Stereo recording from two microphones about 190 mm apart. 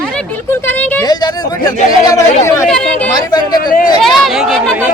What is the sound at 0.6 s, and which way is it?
Speech, 10° left (ahead or behind).